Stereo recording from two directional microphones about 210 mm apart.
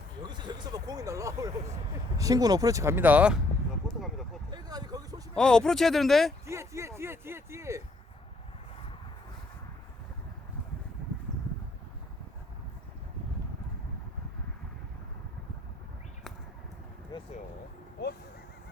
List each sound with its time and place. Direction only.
0.2 s speech: 20° right (ahead or behind)
3.8 s a sound: centre (ahead or behind)
4.5 s vehicle: 20° right (ahead or behind)
5.3 s speech: 5° left (ahead or behind)
6.4 s speech: 15° right (ahead or behind)
17.1 s speech: 20° left (ahead or behind)